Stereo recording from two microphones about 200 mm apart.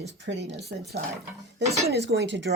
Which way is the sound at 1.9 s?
60° right (ahead or behind).